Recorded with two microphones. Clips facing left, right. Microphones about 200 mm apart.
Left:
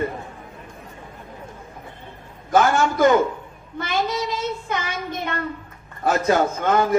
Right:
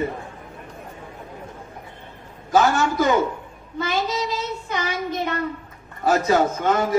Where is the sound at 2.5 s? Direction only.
50° left (ahead or behind).